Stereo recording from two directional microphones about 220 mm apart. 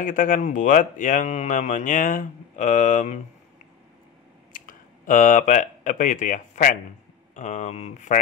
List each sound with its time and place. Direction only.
0.0 s speech: 35° left (ahead or behind)
4.5 s speech: 40° left (ahead or behind)